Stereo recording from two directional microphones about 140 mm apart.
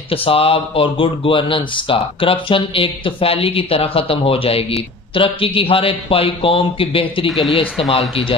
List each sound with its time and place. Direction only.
0.1 s speech: 40° left (ahead or behind)
7.2 s speech: centre (ahead or behind)